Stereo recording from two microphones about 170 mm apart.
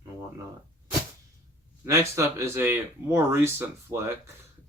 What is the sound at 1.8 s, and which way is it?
Speech, 15° right (ahead or behind).